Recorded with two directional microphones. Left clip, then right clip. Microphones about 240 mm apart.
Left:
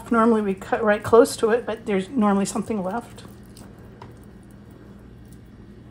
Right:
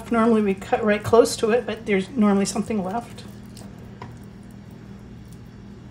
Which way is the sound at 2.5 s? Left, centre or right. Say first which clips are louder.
Even; left.